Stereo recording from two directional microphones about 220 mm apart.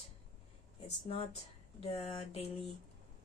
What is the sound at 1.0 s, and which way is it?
Speech, 30° left (ahead or behind).